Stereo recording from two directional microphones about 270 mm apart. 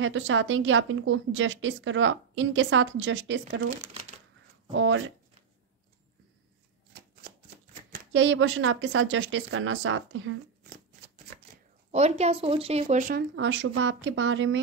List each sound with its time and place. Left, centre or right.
0.0 s a woman's voice: right
4.7 s a woman's voice: right
7.9 s a woman's voice: right
11.9 s speech: right
13.4 s a woman's voice: right